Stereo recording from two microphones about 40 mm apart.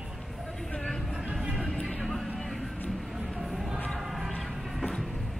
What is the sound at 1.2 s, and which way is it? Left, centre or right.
Music, centre.